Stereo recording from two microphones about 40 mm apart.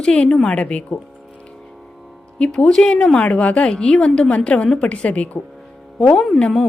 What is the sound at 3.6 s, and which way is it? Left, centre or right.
A woman's voice, left.